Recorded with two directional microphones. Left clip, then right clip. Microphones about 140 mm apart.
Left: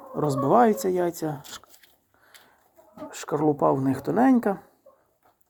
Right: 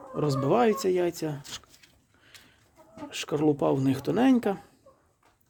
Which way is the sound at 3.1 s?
Centre (ahead or behind).